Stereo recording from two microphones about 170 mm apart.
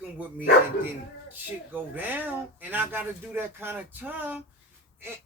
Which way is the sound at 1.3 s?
10° right (ahead or behind).